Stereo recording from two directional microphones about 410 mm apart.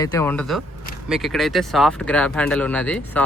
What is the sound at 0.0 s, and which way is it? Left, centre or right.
Speech, centre.